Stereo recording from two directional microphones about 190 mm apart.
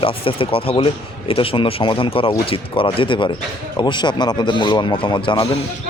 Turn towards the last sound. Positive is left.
turn(degrees=25)  # may be behind; listen again after turning